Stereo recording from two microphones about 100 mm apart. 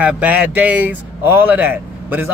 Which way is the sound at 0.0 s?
15° right (ahead or behind).